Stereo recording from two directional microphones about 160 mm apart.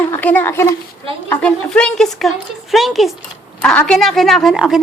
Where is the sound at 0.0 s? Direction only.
10° left (ahead or behind).